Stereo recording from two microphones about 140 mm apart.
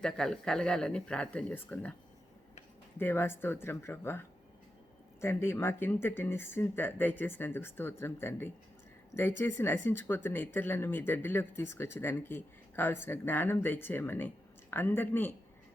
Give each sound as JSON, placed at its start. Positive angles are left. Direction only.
{"t": 0.0, "sound": "speech", "side_deg": 5}
{"t": 3.0, "sound": "speech", "side_deg": 15}